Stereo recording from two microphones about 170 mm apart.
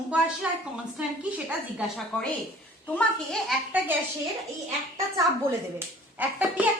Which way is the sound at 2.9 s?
Centre (ahead or behind).